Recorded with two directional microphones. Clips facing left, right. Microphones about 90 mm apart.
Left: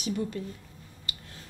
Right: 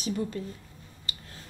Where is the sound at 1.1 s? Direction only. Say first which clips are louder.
Right 1 dB; 30° right (ahead or behind).